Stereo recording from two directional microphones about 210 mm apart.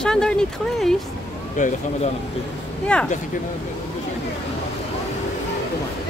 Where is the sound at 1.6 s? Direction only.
35° left (ahead or behind).